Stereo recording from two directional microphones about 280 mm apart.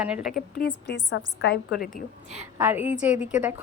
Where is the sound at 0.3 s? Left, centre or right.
Left.